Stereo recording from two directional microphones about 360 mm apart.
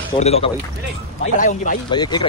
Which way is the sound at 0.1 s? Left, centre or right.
Centre.